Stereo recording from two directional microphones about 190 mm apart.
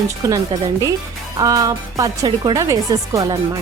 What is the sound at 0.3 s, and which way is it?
Speech, 20° right (ahead or behind).